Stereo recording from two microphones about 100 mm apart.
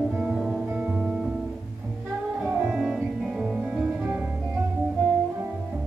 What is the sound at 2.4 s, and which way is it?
Music, 15° right (ahead or behind).